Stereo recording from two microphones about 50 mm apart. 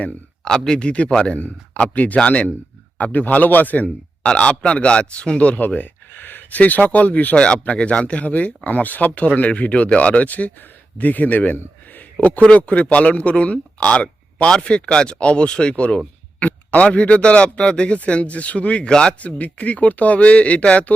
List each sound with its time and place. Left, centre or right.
0.4 s speech: centre
0.8 s a man's voice: left
4.3 s a man's voice: left
7.3 s a man's voice: centre
19.2 s speech: left